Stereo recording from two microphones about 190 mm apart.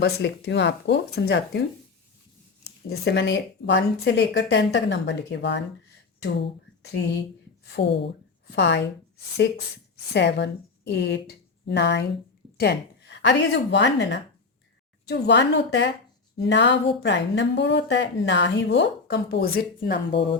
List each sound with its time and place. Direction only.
0.0 s speech: 65° left (ahead or behind)
2.9 s a woman's voice: 60° left (ahead or behind)
10.1 s a woman's voice: 65° left (ahead or behind)